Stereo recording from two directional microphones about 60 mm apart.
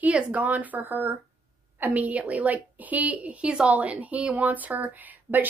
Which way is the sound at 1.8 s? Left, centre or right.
Right.